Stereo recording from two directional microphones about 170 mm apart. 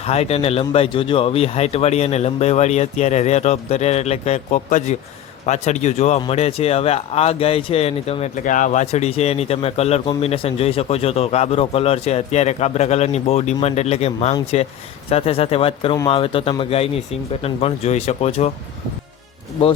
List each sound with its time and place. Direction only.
0.0 s speech: 40° left (ahead or behind)